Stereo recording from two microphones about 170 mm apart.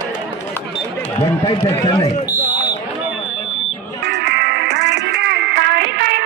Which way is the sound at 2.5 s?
20° left (ahead or behind).